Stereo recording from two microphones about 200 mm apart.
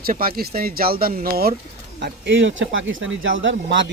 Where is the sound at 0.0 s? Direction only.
50° right (ahead or behind).